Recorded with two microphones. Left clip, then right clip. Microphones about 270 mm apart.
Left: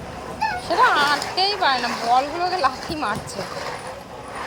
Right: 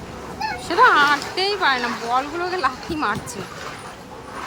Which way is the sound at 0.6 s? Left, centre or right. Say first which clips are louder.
Right 3 dB; centre.